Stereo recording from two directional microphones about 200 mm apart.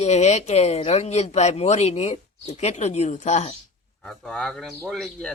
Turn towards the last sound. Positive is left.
turn(degrees=0)  # may be behind; listen again after turning